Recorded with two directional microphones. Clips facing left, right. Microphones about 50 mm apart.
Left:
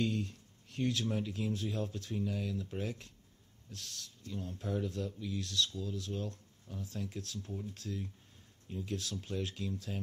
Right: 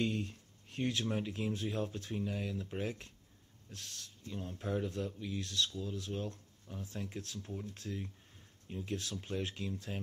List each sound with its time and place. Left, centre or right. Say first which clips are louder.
0.0 s speech: left 1 dB; right